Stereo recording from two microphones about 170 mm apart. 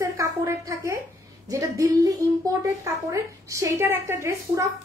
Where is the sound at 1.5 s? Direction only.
20° right (ahead or behind).